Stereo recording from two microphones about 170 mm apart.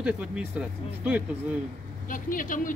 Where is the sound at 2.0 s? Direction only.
50° left (ahead or behind).